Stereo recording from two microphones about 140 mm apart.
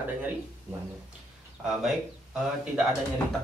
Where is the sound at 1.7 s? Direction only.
5° right (ahead or behind).